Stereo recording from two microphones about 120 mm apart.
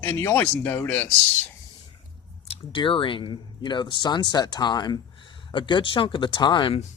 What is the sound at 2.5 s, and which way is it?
Speech, 45° left (ahead or behind).